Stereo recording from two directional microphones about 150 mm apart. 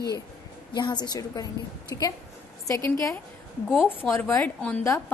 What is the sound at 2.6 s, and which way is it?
Speech, 20° left (ahead or behind).